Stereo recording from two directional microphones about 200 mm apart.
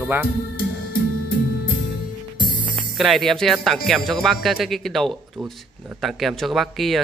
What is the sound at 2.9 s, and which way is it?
Speech, centre (ahead or behind).